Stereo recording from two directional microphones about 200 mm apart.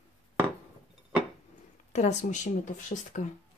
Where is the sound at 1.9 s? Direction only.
35° left (ahead or behind).